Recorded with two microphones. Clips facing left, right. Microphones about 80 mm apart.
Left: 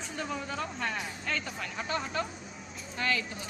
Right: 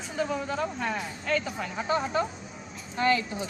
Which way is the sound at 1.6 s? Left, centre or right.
Centre.